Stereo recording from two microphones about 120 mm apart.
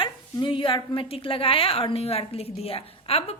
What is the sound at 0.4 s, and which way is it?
A woman's voice, 45° left (ahead or behind).